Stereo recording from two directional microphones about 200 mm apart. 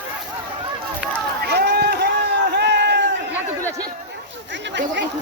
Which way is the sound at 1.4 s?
55° right (ahead or behind).